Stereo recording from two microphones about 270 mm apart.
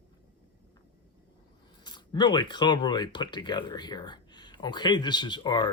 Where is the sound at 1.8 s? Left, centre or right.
Centre.